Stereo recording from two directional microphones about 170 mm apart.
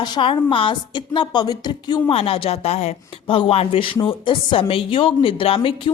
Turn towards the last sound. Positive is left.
turn(degrees=30)  # may be behind; listen again after turning